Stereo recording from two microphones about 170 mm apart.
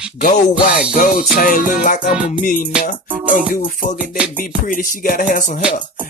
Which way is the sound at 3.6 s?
50° left (ahead or behind).